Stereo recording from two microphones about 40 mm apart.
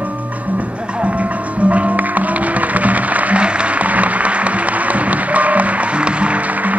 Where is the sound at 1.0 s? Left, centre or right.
Right.